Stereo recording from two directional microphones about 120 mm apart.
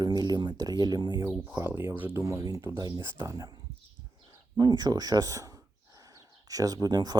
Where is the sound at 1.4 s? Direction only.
20° right (ahead or behind).